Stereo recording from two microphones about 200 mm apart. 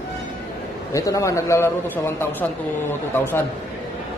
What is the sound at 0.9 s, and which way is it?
A man's voice, 15° left (ahead or behind).